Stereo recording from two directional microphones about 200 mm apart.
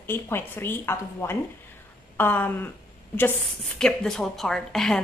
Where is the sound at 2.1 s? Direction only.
10° left (ahead or behind).